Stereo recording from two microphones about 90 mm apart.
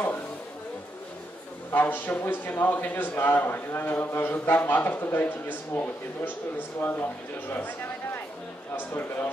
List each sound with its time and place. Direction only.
1.7 s a man's voice: 20° left (ahead or behind)